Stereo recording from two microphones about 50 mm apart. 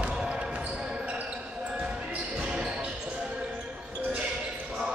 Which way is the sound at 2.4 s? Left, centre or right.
Centre.